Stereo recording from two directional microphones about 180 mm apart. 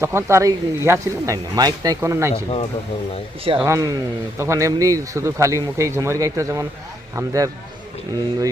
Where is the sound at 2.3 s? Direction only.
35° left (ahead or behind).